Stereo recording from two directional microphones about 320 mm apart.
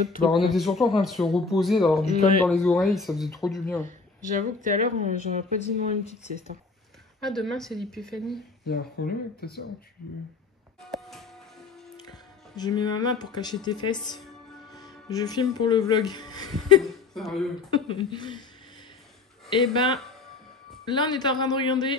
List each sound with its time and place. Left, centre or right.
0.3 s speech: centre
4.4 s speech: right
7.2 s speech: centre
8.6 s speech: left
10.9 s music: centre
12.0 s speech: centre
16.8 s speech: centre
17.6 s speech: centre
19.7 s speech: centre